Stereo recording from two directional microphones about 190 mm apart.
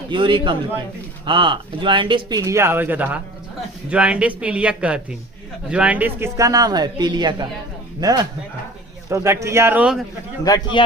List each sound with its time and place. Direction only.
0.1 s speech: 25° right (ahead or behind); by 10.0 s 5° right (ahead or behind)
10.4 s a man's voice: 20° left (ahead or behind)